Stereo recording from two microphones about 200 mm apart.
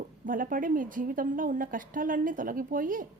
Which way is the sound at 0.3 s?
45° right (ahead or behind).